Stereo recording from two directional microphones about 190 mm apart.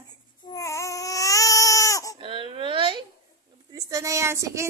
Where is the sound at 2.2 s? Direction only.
30° right (ahead or behind).